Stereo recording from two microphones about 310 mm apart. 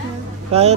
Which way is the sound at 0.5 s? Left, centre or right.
Centre.